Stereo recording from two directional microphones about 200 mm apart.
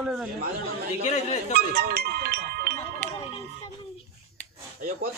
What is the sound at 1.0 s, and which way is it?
Speech, 35° left (ahead or behind).